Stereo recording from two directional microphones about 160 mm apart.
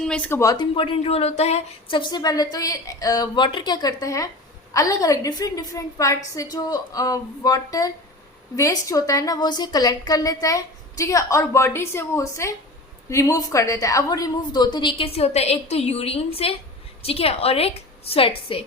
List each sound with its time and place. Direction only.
0.0 s a woman's voice: 5° left (ahead or behind)
0.5 s a woman's voice: 30° left (ahead or behind)